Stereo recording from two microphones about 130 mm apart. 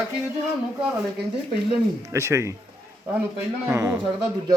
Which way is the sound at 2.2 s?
20° right (ahead or behind).